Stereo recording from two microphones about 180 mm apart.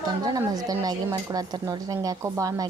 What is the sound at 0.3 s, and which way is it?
Speech, 20° right (ahead or behind).